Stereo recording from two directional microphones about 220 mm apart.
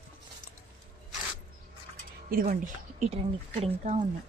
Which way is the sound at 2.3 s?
40° right (ahead or behind).